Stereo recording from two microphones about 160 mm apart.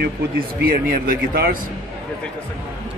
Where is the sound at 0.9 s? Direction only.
70° right (ahead or behind).